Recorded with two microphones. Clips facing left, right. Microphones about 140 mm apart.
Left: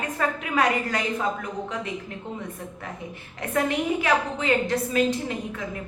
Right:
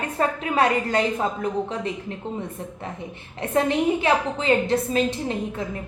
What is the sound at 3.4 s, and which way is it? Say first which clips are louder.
A woman's voice: right 3 dB; 25° right (ahead or behind).